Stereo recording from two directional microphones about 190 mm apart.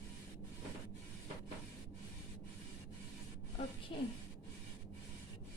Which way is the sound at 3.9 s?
30° left (ahead or behind).